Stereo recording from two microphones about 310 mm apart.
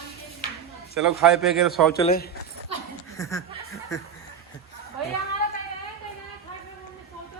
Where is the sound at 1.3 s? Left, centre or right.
Centre.